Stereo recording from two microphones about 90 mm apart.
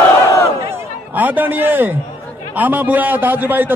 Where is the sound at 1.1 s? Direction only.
20° right (ahead or behind).